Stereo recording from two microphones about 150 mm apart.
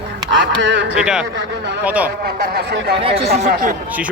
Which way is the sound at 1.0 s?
5° right (ahead or behind).